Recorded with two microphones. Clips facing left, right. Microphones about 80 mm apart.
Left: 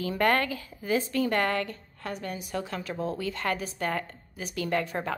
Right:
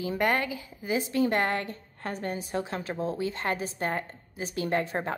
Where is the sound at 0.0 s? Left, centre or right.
Centre.